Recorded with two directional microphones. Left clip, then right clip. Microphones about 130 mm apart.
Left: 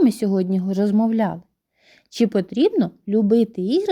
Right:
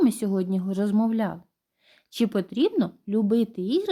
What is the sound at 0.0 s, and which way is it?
A woman's voice, 25° left (ahead or behind).